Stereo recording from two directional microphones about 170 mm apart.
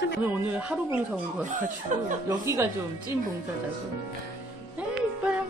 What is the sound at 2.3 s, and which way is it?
Speech, 20° right (ahead or behind).